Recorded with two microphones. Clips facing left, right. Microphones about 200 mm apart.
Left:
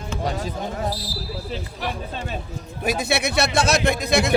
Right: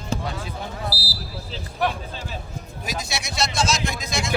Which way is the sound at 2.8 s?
60° left (ahead or behind).